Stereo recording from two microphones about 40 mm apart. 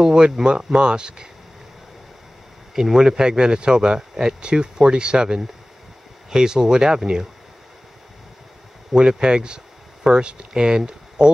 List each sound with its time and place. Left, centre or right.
0.0 s speech: centre
2.7 s speech: centre
8.9 s speech: right